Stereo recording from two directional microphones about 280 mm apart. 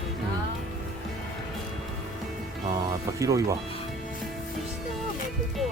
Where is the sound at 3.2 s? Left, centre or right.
Centre.